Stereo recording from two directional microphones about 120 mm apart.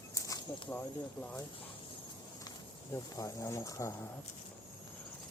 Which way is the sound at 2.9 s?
25° left (ahead or behind).